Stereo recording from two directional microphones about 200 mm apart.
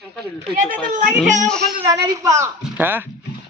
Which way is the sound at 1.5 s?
5° left (ahead or behind).